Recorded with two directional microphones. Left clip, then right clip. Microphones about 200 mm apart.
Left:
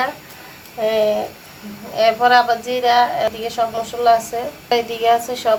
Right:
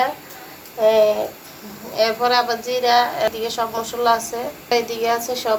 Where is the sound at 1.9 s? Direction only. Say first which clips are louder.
Left 4 dB; 30° left (ahead or behind).